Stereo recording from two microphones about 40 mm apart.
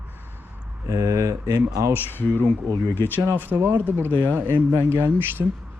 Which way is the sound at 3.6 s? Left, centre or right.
Right.